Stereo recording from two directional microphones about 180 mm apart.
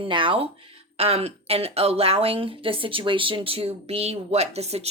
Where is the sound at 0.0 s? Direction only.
30° right (ahead or behind).